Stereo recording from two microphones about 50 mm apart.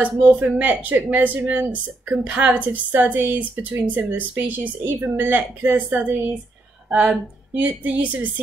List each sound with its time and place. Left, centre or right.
0.0 s a woman's voice: right